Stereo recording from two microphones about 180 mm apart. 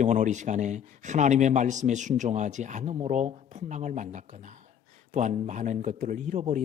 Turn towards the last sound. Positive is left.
turn(degrees=-40)  # may be behind; listen again after turning